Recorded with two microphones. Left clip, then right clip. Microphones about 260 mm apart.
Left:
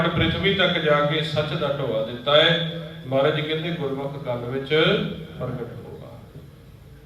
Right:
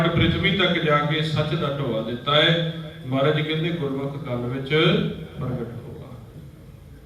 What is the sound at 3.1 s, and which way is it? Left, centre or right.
A man's voice, left.